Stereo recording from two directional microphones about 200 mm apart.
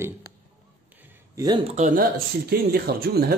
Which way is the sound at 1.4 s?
20° right (ahead or behind).